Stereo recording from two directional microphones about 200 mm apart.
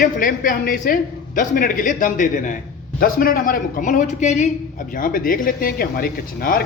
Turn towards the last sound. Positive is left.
turn(degrees=50)  # may be behind; listen again after turning